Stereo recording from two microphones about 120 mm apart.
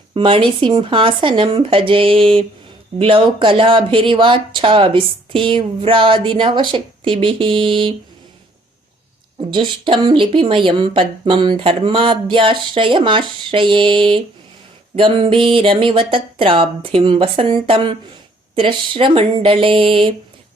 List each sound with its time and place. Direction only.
0.1 s speech: 45° right (ahead or behind)
9.5 s speech: 45° right (ahead or behind)